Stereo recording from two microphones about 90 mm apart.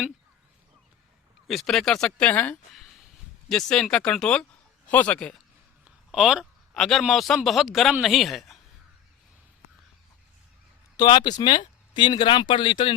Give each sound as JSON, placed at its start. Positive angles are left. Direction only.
{"t": 1.5, "sound": "speech", "side_deg": 0}
{"t": 2.7, "sound": "a sound", "side_deg": 0}
{"t": 3.5, "sound": "speech", "side_deg": 5}
{"t": 6.1, "sound": "speech", "side_deg": -5}
{"t": 10.9, "sound": "speech", "side_deg": 50}